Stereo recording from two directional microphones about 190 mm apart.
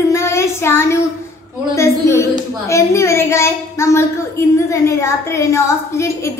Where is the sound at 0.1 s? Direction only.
15° left (ahead or behind).